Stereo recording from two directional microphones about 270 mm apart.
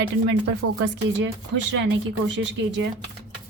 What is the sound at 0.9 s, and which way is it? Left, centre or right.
A woman's voice, right.